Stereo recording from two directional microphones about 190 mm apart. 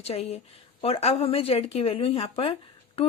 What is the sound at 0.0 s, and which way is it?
A woman's voice, 30° left (ahead or behind).